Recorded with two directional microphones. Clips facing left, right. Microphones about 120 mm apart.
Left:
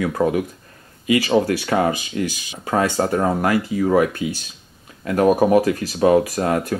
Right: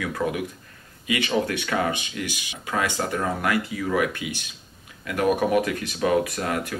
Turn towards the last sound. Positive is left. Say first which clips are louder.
# left 7 dB
turn(degrees=35)  # may be behind; listen again after turning